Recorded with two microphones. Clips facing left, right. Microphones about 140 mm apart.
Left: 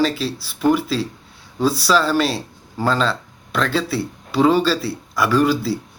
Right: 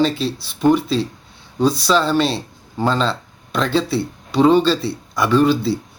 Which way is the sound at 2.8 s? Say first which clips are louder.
Right 1 dB; 20° right (ahead or behind).